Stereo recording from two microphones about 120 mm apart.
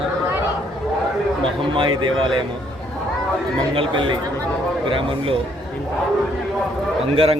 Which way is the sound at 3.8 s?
45° right (ahead or behind).